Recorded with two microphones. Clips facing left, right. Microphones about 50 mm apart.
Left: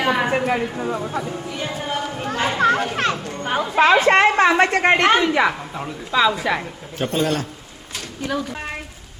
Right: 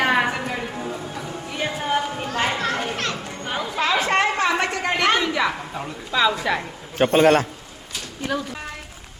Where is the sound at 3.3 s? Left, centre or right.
Left.